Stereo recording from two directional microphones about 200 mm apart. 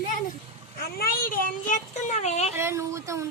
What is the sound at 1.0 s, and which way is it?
A child's voice, 45° left (ahead or behind).